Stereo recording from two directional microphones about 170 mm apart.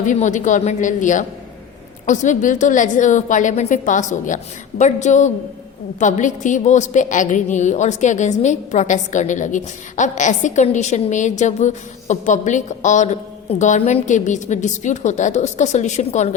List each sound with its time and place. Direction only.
0.0 s a woman's voice: 45° left (ahead or behind)